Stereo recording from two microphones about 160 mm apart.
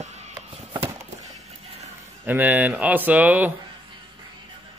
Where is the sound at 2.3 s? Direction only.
10° right (ahead or behind).